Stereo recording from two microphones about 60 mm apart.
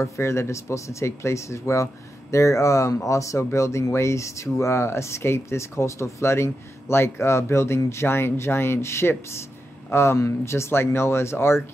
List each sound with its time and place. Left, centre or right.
0.0 s speech: left